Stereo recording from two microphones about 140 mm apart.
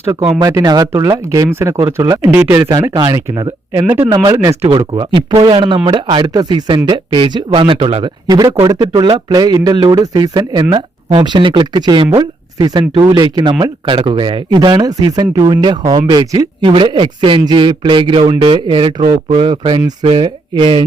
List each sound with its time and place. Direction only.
0.0 s speech: 20° right (ahead or behind)
2.4 s speech: 10° right (ahead or behind)
2.9 s speech: 25° right (ahead or behind)
4.9 s speech: 35° right (ahead or behind)
8.3 s speech: 25° right (ahead or behind)
16.6 s speech: 35° right (ahead or behind)